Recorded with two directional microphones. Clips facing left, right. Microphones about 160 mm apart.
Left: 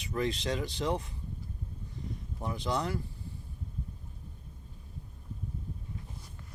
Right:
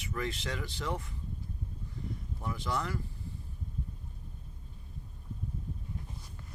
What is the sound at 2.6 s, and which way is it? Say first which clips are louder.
Speech: left 3 dB; 20° left (ahead or behind).